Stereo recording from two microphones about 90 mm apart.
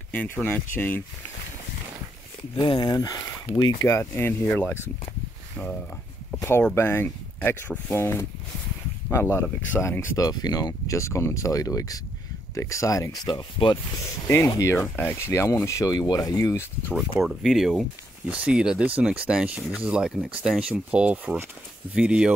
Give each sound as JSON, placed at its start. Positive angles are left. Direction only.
{"t": 0.1, "sound": "speech", "side_deg": 20}
{"t": 2.5, "sound": "speech", "side_deg": 60}
{"t": 2.9, "sound": "speech", "side_deg": 45}
{"t": 3.8, "sound": "speech", "side_deg": 30}
{"t": 4.5, "sound": "speech", "side_deg": 15}
{"t": 6.3, "sound": "speech", "side_deg": 25}
{"t": 10.1, "sound": "speech", "side_deg": 45}
{"t": 13.3, "sound": "speech", "side_deg": 60}
{"t": 14.2, "sound": "speech", "side_deg": 30}
{"t": 17.4, "sound": "speech", "side_deg": 0}
{"t": 18.3, "sound": "speech", "side_deg": -10}